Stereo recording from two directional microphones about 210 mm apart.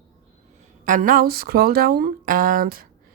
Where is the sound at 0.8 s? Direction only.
40° right (ahead or behind).